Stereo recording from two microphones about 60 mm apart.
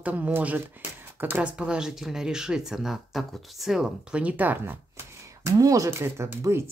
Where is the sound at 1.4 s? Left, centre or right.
Centre.